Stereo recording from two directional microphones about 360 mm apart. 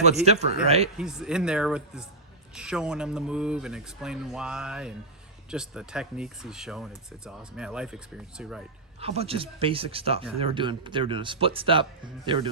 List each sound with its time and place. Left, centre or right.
0.0 s speech: centre
0.9 s speech: centre
9.0 s speech: centre